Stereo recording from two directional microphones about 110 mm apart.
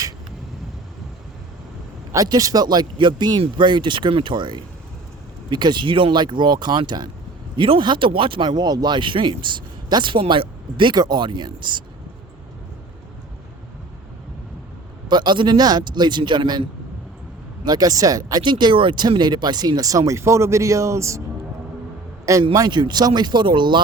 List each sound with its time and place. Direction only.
2.1 s speech: 35° right (ahead or behind)
15.0 s speech: 45° right (ahead or behind)
17.7 s speech: 35° right (ahead or behind)
22.5 s speech: 40° right (ahead or behind)